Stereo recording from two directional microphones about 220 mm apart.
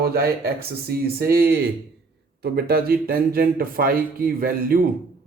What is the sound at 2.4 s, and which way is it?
Speech, 45° right (ahead or behind).